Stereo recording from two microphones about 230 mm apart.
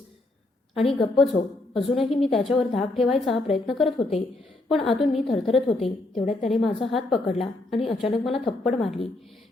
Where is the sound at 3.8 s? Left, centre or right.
Left.